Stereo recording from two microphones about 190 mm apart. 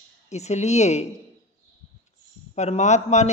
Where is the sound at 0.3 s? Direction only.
35° left (ahead or behind).